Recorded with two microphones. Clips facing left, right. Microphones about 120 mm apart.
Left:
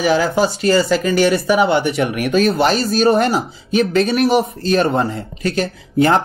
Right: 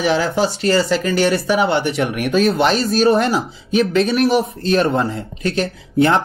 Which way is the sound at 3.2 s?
40° left (ahead or behind).